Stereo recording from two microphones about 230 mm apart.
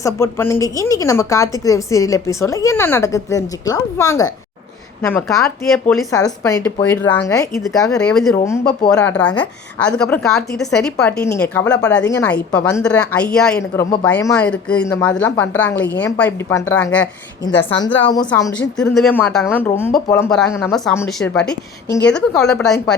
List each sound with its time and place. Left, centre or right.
0.0 s a woman's voice: centre
5.9 s a woman's voice: centre
7.6 s a woman's voice: centre
17.7 s speech: left
18.0 s a woman's voice: centre